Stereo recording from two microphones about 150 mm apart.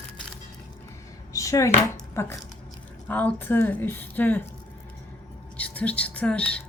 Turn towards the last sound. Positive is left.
turn(degrees=10)  # may be behind; listen again after turning